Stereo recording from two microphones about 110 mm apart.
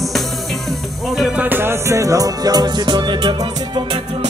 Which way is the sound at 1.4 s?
20° right (ahead or behind).